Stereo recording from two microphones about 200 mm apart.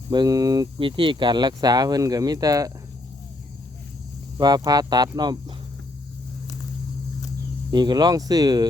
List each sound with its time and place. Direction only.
0.1 s speech: 20° right (ahead or behind)
4.4 s speech: 20° right (ahead or behind)
7.7 s speech: 20° right (ahead or behind)